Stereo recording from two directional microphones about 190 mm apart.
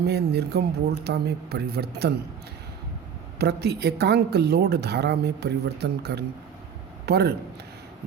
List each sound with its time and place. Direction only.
0.0 s speech: 60° right (ahead or behind)
3.3 s a man's voice: 60° right (ahead or behind)